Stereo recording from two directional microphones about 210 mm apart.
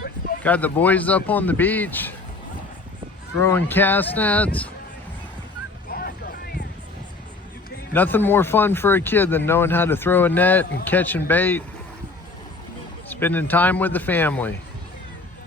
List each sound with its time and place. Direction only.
0.4 s a man's voice: 5° left (ahead or behind)
3.4 s a man's voice: 10° left (ahead or behind)
5.9 s music: 45° left (ahead or behind)
7.9 s a man's voice: 10° left (ahead or behind)
13.1 s a man's voice: 10° left (ahead or behind)